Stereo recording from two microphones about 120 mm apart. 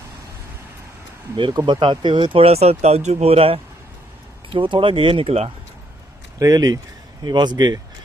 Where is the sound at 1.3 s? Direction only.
45° right (ahead or behind).